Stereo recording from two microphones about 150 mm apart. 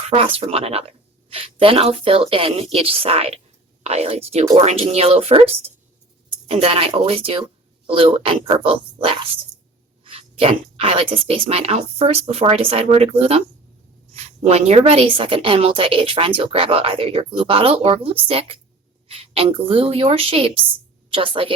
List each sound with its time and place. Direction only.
0.3 s a woman's voice: 40° right (ahead or behind)